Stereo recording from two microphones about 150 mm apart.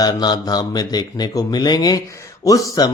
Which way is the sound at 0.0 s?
25° left (ahead or behind).